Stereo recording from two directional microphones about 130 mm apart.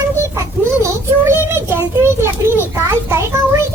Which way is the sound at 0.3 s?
20° right (ahead or behind).